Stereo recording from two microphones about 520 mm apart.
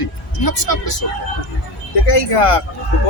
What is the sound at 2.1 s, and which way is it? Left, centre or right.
Speech, left.